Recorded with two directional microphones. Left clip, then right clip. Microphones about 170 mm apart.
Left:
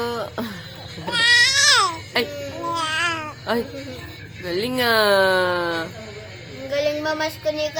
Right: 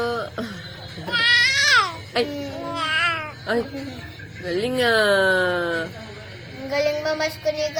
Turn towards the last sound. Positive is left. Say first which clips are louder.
# even
turn(degrees=10)  # may be behind; listen again after turning